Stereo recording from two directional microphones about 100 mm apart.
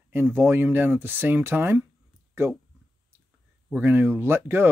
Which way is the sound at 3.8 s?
20° right (ahead or behind).